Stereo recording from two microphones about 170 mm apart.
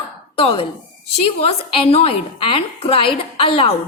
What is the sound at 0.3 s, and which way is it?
A woman's voice, 30° left (ahead or behind).